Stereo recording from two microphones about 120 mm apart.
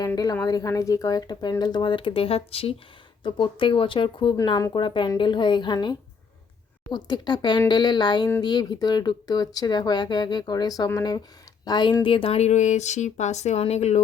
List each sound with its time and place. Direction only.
0.4 s speech: 30° left (ahead or behind); by 2.7 s 55° left (ahead or behind)
3.2 s speech: 45° left (ahead or behind)
4.4 s speech: 35° left (ahead or behind); by 14.0 s 65° left (ahead or behind)